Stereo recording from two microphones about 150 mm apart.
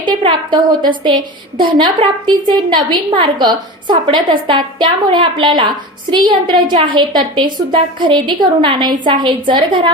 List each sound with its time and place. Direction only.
0.0 s a woman's voice: 30° right (ahead or behind)